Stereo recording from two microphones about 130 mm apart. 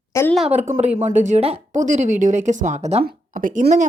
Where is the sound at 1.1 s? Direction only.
65° right (ahead or behind).